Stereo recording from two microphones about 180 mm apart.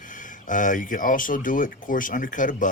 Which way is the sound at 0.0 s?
45° left (ahead or behind).